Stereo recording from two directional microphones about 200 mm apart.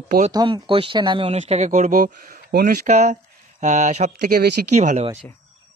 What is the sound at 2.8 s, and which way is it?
Speech, 35° right (ahead or behind).